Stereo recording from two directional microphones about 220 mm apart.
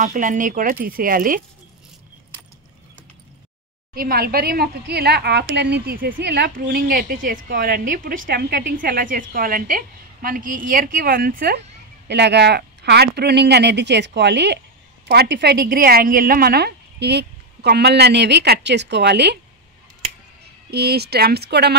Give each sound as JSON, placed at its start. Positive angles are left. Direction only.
{"t": 0.0, "sound": "a woman's voice", "side_deg": -35}
{"t": 3.9, "sound": "a woman's voice", "side_deg": -40}
{"t": 20.7, "sound": "a woman's voice", "side_deg": -45}